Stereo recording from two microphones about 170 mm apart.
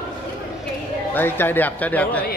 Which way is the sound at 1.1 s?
10° left (ahead or behind).